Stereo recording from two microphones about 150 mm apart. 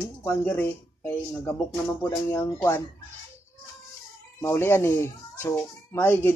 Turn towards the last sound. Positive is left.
turn(degrees=15)  # may be behind; listen again after turning